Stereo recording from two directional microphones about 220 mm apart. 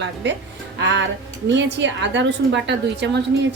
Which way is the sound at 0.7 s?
55° right (ahead or behind).